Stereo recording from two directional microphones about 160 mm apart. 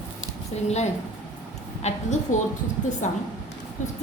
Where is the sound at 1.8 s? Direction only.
45° left (ahead or behind).